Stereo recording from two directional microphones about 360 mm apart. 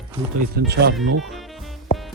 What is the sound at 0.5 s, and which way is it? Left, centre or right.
Speech, right.